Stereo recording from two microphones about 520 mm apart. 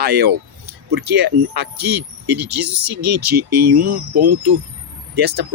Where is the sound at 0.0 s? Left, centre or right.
Right.